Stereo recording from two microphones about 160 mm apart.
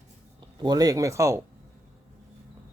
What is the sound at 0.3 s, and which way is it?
Speech, 25° right (ahead or behind).